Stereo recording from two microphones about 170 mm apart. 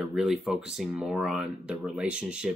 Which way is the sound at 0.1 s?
5° right (ahead or behind).